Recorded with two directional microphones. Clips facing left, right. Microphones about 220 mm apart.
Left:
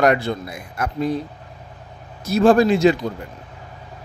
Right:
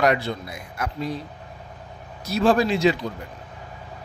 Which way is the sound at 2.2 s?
50° left (ahead or behind).